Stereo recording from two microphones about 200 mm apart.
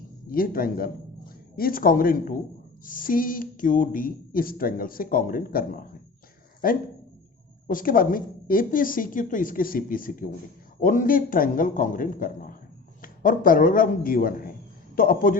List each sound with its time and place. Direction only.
0.3 s a man's voice: 45° left (ahead or behind)